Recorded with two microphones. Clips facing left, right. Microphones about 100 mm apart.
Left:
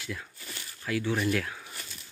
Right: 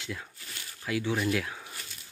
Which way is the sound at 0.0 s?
20° right (ahead or behind).